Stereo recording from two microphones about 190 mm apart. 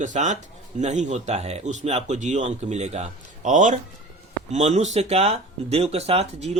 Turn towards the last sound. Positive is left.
turn(degrees=-30)  # may be behind; listen again after turning